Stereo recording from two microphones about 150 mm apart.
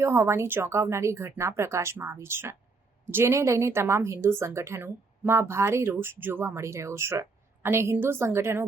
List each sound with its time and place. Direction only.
0.0 s a woman's voice: 20° right (ahead or behind)